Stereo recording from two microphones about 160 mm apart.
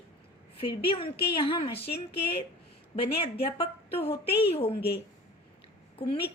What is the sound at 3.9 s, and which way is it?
Speech, 35° left (ahead or behind).